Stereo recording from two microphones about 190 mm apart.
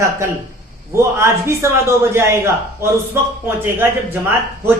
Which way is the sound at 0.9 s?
15° right (ahead or behind).